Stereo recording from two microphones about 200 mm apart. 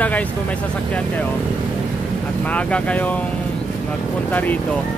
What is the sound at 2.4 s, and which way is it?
Speech, 5° left (ahead or behind).